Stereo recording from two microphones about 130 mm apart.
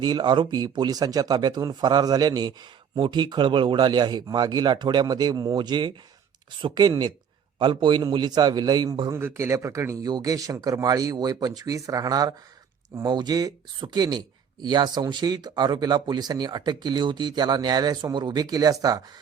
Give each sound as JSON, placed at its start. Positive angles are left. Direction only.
{"t": 0.0, "sound": "a man's voice", "side_deg": -35}